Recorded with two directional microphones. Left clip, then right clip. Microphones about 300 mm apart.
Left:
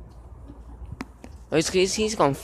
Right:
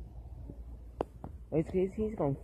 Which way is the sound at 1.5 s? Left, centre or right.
Left.